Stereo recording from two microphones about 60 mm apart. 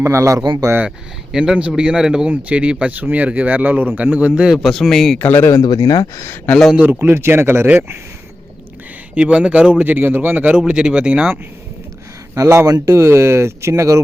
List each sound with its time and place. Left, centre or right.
0.0 s speech: right
0.9 s speech: centre; by 4.4 s right
4.4 s speech: centre
5.2 s speech: left
5.8 s speech: left
7.0 s a man's voice: right
9.1 s speech: right
10.6 s speech: centre
12.3 s speech: right
12.6 s speech: right